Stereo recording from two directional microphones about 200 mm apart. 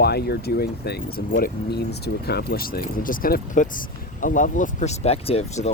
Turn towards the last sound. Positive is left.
turn(degrees=30)  # may be behind; listen again after turning